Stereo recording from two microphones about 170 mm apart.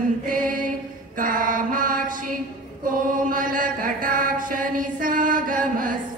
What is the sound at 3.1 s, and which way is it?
Chant, 55° right (ahead or behind).